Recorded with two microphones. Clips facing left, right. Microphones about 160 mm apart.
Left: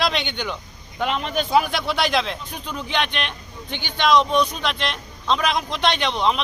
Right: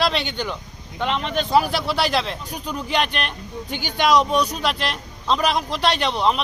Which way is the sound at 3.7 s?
45° right (ahead or behind).